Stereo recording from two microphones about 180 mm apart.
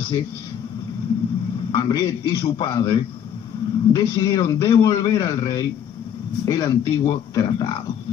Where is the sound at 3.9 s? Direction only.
25° left (ahead or behind).